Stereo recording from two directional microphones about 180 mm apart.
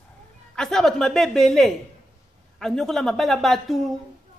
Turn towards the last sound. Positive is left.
turn(degrees=0)  # may be behind; listen again after turning